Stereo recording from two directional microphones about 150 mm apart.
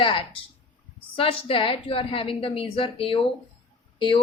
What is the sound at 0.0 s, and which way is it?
Speech, 35° left (ahead or behind).